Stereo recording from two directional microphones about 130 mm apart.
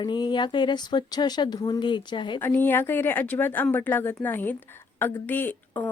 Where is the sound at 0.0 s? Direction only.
35° left (ahead or behind).